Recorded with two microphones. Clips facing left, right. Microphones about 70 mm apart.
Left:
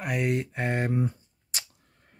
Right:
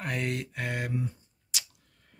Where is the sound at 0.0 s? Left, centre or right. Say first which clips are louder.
Left 5 dB; centre.